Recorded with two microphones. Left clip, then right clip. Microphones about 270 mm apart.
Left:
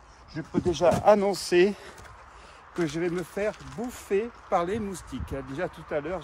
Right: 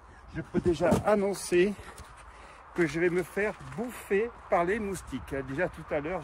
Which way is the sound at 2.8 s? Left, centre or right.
Centre.